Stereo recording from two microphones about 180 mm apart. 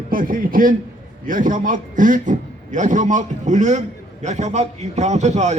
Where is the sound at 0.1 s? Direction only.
50° right (ahead or behind).